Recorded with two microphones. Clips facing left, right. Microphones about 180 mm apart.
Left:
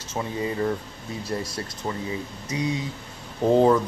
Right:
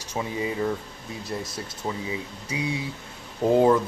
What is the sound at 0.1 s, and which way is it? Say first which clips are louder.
Speech: left 1 dB; 5° right (ahead or behind).